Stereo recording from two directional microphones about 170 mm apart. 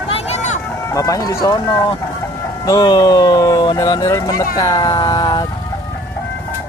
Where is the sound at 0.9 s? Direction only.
20° left (ahead or behind).